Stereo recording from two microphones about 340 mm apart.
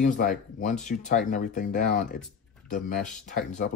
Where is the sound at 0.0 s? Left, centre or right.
Left.